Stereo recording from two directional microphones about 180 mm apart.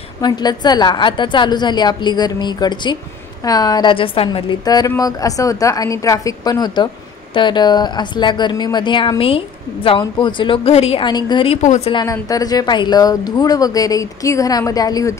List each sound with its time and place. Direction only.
0.2 s a woman's voice: 25° left (ahead or behind); by 11.9 s 40° left (ahead or behind)
11.9 s a woman's voice: 20° left (ahead or behind)